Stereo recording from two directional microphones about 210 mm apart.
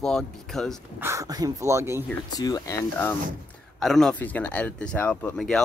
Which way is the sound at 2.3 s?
20° left (ahead or behind).